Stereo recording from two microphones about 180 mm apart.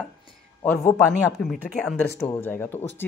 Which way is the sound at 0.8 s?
20° left (ahead or behind).